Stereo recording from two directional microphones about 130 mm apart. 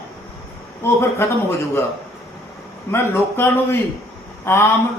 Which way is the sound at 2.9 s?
15° left (ahead or behind).